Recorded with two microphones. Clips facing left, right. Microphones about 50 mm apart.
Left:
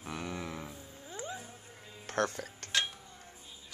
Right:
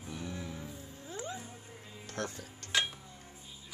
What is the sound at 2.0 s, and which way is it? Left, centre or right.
Music, left.